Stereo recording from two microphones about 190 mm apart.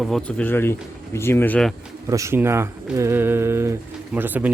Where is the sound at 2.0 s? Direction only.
15° right (ahead or behind).